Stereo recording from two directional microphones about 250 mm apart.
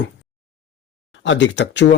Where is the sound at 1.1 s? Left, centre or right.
Left.